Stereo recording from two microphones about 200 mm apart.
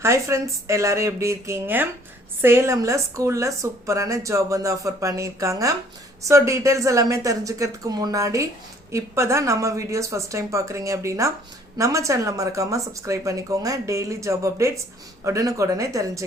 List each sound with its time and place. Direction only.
0.0 s a woman's voice: 15° right (ahead or behind)